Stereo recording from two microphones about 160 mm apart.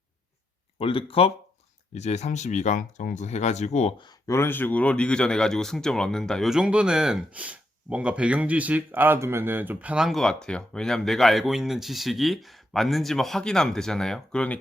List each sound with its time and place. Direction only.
0.8 s speech: 35° left (ahead or behind)
4.0 s speech: 20° left (ahead or behind)